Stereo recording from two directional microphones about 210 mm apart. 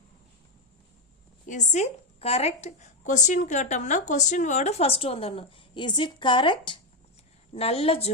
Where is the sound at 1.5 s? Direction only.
35° left (ahead or behind).